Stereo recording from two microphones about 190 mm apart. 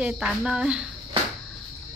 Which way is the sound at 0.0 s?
5° right (ahead or behind).